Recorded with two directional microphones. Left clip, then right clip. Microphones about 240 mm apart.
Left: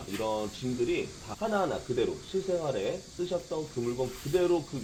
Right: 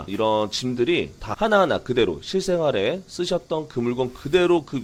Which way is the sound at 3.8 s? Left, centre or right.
Right.